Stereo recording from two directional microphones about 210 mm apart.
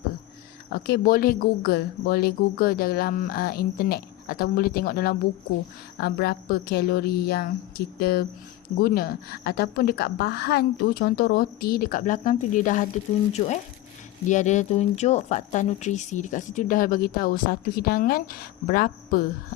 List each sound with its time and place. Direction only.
0.7 s speech: 50° left (ahead or behind)
14.3 s speech: 35° left (ahead or behind)